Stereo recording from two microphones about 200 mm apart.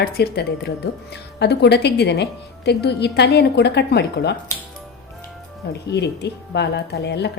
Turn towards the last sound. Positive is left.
turn(degrees=55)  # may be behind; listen again after turning